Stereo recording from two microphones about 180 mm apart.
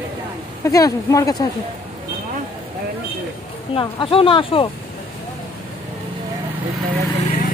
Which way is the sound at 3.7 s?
30° left (ahead or behind).